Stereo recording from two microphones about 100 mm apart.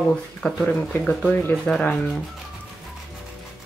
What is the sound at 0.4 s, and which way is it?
Speech, 5° left (ahead or behind).